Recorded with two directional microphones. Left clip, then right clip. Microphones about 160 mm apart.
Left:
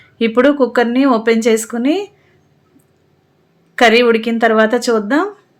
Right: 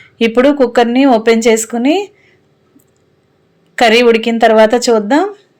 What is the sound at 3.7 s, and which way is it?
Speech, 20° right (ahead or behind).